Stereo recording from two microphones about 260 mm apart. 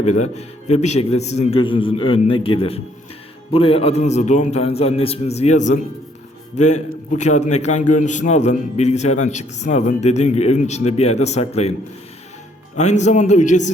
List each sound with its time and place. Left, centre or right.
0.0 s a man's voice: left
12.7 s a man's voice: left